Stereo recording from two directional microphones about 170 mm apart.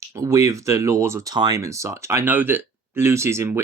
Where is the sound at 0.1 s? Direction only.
15° right (ahead or behind).